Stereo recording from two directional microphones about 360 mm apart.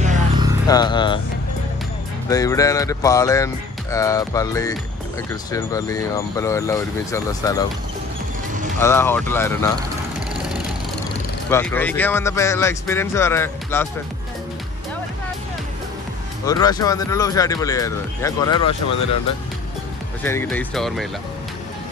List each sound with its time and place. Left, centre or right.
0.0 s music: centre
0.7 s speech: centre
2.2 s speech: centre
8.7 s speech: centre
11.5 s speech: centre
16.4 s speech: centre
20.2 s speech: centre